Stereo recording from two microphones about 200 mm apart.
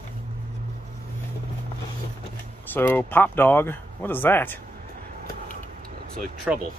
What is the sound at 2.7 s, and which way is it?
Speech, 10° left (ahead or behind).